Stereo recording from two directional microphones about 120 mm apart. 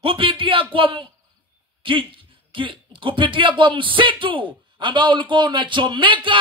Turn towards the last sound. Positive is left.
turn(degrees=-45)  # may be behind; listen again after turning